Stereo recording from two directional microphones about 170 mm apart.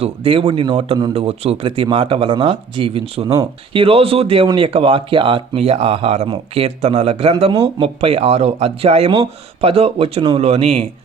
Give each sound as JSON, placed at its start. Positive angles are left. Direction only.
{"t": 0.0, "sound": "speech", "side_deg": -30}